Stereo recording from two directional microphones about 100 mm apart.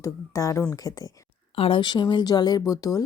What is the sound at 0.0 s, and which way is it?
Speech, 30° left (ahead or behind).